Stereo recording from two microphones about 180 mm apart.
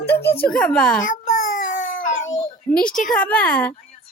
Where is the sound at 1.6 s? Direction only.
50° left (ahead or behind).